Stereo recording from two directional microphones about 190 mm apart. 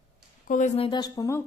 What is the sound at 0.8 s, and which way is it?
Speech, 25° left (ahead or behind).